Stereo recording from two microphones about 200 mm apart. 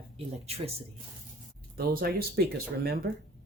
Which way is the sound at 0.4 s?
30° right (ahead or behind).